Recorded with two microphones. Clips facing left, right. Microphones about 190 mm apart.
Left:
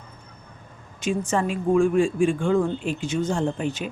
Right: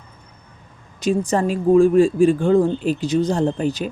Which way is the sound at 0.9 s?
35° right (ahead or behind).